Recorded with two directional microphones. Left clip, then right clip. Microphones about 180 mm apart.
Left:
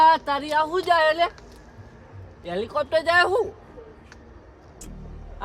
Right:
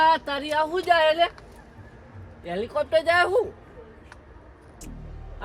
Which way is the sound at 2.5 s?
30° left (ahead or behind).